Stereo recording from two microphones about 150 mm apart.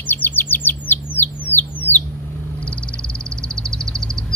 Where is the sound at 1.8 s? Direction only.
10° left (ahead or behind).